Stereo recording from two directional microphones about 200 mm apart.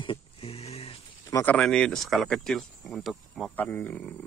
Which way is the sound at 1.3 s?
10° left (ahead or behind).